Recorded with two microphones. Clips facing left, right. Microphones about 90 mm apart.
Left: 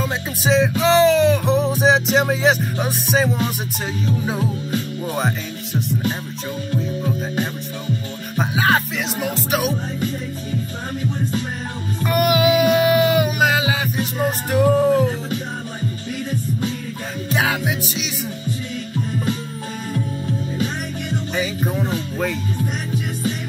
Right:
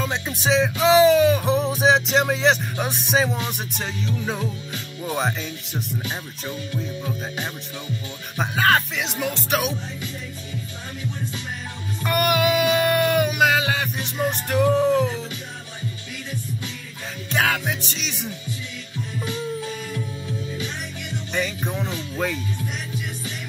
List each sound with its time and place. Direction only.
0.0 s music: centre (ahead or behind)
8.4 s music: 5° left (ahead or behind)
12.0 s music: centre (ahead or behind)
17.3 s music: 5° left (ahead or behind)
20.5 s music: 45° left (ahead or behind)
21.4 s music: 5° left (ahead or behind)